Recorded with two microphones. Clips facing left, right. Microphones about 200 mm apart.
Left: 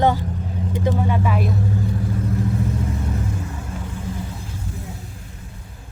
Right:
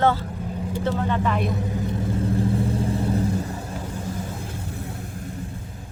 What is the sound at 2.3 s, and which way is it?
Vehicle, 30° right (ahead or behind).